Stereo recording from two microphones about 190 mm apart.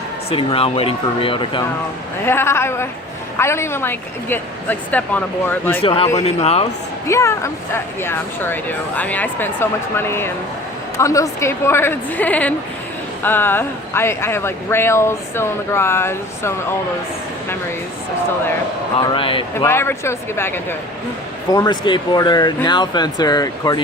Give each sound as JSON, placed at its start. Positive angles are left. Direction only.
{"t": 0.3, "sound": "speech", "side_deg": 30}
{"t": 2.2, "sound": "speech", "side_deg": 10}
{"t": 5.8, "sound": "speech", "side_deg": 30}
{"t": 7.1, "sound": "speech", "side_deg": 15}
{"t": 19.1, "sound": "speech", "side_deg": 25}
{"t": 19.5, "sound": "speech", "side_deg": 15}